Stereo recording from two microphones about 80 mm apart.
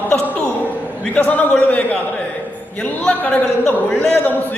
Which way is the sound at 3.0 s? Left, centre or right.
Centre.